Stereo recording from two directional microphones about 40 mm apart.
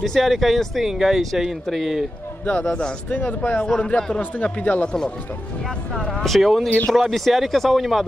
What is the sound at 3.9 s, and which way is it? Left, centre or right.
Speech, left.